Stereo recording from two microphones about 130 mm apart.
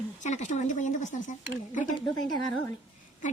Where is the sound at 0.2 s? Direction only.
65° left (ahead or behind).